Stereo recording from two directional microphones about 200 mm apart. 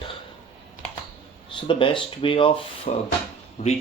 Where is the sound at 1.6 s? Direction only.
25° left (ahead or behind).